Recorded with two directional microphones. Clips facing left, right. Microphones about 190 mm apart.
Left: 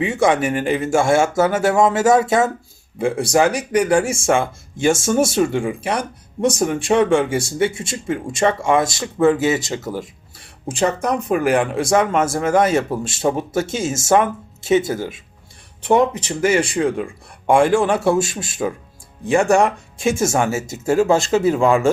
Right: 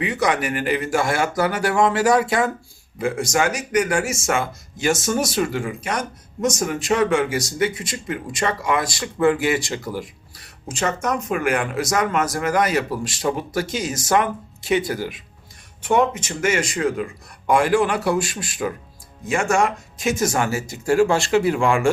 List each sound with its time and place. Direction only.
0.0 s speech: 25° left (ahead or behind)
5.6 s speech: 30° left (ahead or behind)
15.8 s speech: 35° left (ahead or behind)